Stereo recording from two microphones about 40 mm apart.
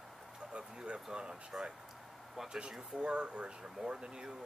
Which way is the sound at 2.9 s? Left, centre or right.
Right.